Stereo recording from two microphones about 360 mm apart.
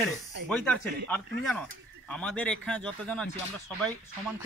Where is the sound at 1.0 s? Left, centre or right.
Centre.